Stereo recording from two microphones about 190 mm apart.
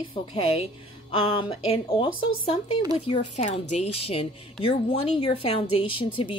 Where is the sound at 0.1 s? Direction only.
25° left (ahead or behind).